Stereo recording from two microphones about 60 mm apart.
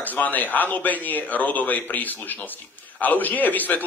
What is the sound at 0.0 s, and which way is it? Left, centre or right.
A man's voice, left.